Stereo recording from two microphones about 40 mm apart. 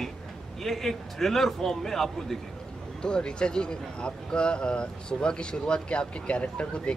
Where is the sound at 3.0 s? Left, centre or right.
Left.